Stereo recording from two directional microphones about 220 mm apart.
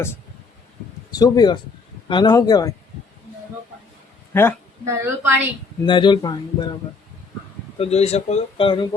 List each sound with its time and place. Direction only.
1.1 s speech: 20° left (ahead or behind)
4.3 s speech: 10° left (ahead or behind)
4.9 s a woman's voice: 10° right (ahead or behind)
5.8 s speech: 20° left (ahead or behind)
7.8 s speech: 30° left (ahead or behind)